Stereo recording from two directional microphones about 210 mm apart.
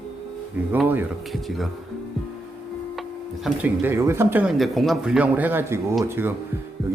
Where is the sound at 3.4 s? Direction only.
10° right (ahead or behind).